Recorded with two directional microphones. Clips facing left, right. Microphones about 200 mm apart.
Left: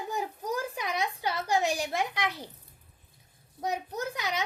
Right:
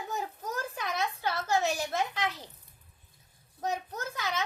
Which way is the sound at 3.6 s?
15° left (ahead or behind).